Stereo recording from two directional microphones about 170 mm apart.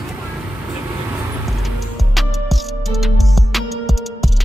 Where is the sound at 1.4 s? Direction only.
Centre (ahead or behind).